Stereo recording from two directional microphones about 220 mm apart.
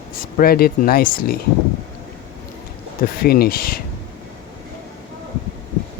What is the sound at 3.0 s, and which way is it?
Speech, 45° left (ahead or behind).